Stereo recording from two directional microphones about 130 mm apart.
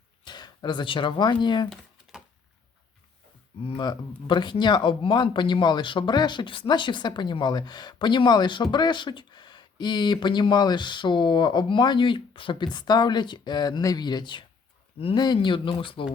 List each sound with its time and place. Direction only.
0.3 s speech: 35° left (ahead or behind)
1.7 s a sound: centre (ahead or behind)
4.3 s speech: 35° left (ahead or behind)